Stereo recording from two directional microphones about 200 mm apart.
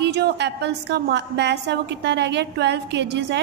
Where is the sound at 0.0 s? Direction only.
60° right (ahead or behind).